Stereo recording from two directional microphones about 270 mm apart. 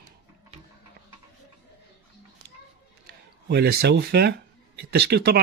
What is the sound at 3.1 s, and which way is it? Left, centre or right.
Speech, right.